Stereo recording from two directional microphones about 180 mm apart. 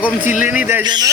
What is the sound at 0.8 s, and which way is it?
Speech, 25° right (ahead or behind).